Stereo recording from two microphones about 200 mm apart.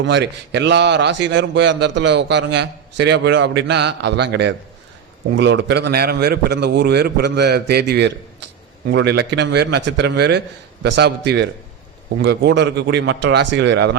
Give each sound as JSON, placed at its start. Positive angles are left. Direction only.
{"t": 0.0, "sound": "a man's voice", "side_deg": -60}